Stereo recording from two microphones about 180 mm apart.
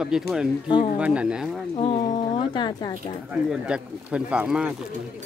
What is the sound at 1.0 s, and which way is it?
Speech, 5° right (ahead or behind).